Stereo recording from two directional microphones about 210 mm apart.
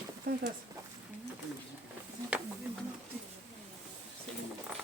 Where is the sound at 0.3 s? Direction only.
50° right (ahead or behind).